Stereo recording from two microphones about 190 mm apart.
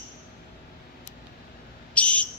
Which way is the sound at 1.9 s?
5° left (ahead or behind).